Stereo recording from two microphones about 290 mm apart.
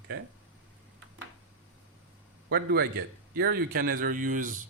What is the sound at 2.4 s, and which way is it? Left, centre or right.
A man's voice, right.